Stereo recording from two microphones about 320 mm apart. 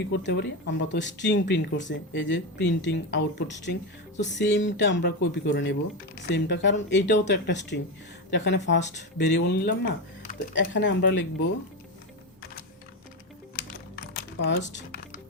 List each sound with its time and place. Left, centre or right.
0.0 s speech: left
14.2 s typing: left